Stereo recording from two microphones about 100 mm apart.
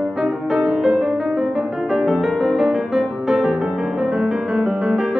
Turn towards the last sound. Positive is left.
turn(degrees=-5)  # may be behind; listen again after turning